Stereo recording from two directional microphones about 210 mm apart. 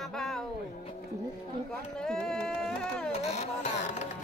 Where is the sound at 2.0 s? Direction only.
5° left (ahead or behind).